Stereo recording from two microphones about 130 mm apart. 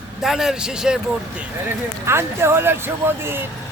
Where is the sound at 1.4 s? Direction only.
15° right (ahead or behind).